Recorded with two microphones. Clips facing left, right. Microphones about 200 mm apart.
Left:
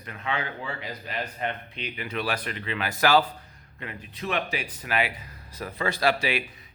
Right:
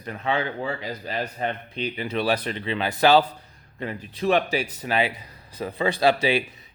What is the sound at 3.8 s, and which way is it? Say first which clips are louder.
Speech: right 7 dB; 35° right (ahead or behind).